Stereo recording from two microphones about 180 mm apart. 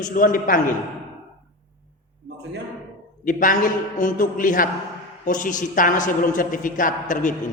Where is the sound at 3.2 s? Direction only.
50° left (ahead or behind).